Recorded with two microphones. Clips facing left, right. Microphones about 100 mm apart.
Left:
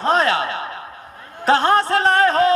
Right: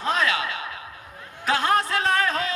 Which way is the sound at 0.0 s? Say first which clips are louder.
Left 7 dB; 35° left (ahead or behind).